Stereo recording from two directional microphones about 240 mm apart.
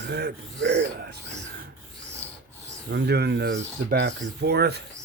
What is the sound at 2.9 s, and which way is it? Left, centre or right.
Speech, right.